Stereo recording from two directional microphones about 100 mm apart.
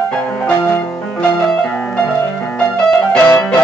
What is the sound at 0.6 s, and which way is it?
Music, 25° left (ahead or behind).